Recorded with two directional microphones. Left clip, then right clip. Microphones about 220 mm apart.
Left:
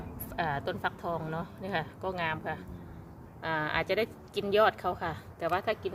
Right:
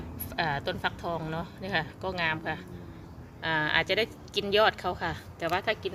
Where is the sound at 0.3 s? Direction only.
Centre (ahead or behind).